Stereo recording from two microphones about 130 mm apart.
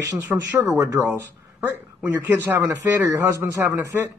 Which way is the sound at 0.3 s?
15° right (ahead or behind).